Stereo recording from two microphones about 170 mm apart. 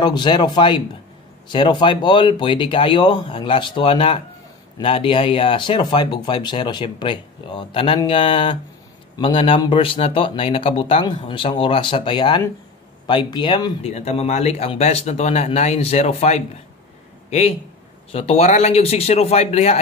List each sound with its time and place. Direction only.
0.0 s speech: 25° left (ahead or behind)
13.8 s speech: 40° left (ahead or behind)